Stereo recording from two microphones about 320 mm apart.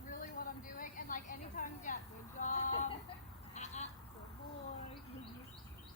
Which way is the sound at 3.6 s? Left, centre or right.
Left.